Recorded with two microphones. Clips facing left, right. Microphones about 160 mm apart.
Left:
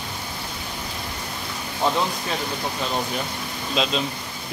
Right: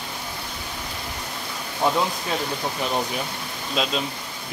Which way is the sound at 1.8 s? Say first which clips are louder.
Right 1 dB; 10° right (ahead or behind).